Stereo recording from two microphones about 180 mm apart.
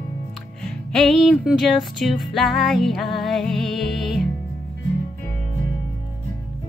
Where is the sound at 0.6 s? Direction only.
5° left (ahead or behind).